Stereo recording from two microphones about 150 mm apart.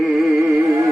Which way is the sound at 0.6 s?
20° right (ahead or behind).